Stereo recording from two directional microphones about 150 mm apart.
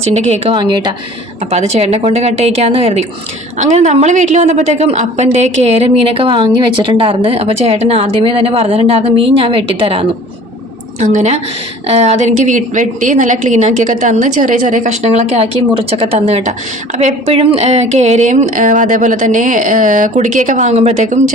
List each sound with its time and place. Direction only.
0.2 s a woman's voice: 45° right (ahead or behind)
0.5 s speech: 30° right (ahead or behind)
1.5 s a woman's voice: 45° right (ahead or behind)
11.1 s a woman's voice: 50° right (ahead or behind)